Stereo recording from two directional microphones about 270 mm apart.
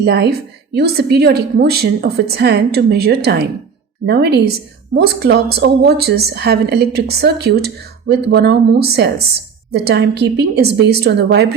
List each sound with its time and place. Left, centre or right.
0.0 s a woman's voice: right